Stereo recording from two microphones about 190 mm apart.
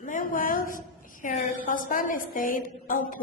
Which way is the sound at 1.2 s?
45° left (ahead or behind).